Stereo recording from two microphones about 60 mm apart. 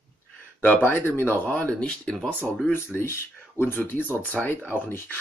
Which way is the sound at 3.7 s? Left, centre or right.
Left.